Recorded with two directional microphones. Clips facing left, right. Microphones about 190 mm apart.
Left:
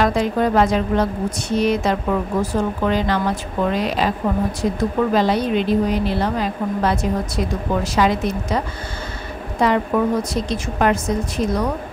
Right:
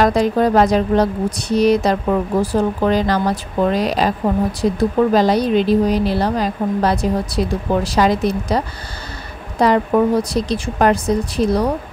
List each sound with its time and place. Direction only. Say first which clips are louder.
0.0 s speech: right 3 dB; 40° right (ahead or behind)